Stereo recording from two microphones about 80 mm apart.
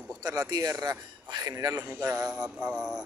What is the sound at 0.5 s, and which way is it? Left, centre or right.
A man's voice, right.